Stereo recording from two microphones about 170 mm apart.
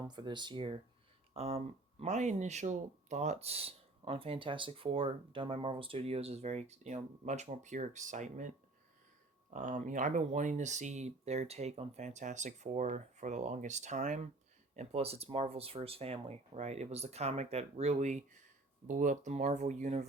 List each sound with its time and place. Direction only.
0.1 s speech: 25° right (ahead or behind)